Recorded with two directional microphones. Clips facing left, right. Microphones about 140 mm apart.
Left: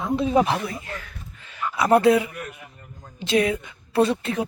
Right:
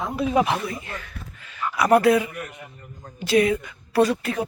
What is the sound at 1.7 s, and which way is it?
Speech, 25° left (ahead or behind).